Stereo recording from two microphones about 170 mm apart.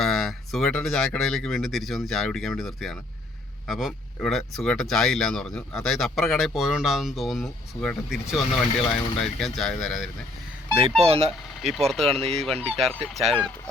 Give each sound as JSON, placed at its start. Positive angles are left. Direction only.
{"t": 0.0, "sound": "speech", "side_deg": 0}
{"t": 10.8, "sound": "speech", "side_deg": -35}
{"t": 11.3, "sound": "speech", "side_deg": 0}
{"t": 12.0, "sound": "speech", "side_deg": -35}
{"t": 12.3, "sound": "speech", "side_deg": 0}